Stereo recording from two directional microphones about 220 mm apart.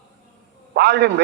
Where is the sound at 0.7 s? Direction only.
50° right (ahead or behind).